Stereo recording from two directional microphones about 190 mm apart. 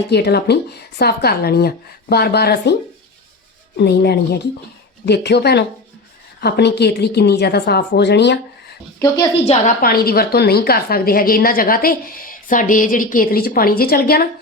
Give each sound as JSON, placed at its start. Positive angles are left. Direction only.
{"t": 0.1, "sound": "speech", "side_deg": 60}
{"t": 3.8, "sound": "speech", "side_deg": 60}
{"t": 9.4, "sound": "a woman's voice", "side_deg": 35}
{"t": 9.8, "sound": "a woman's voice", "side_deg": 55}